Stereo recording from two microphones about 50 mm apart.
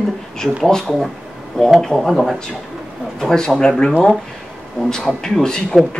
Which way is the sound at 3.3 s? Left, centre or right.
Centre.